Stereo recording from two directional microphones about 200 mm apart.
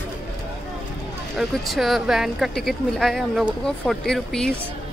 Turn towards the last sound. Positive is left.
turn(degrees=5)  # may be behind; listen again after turning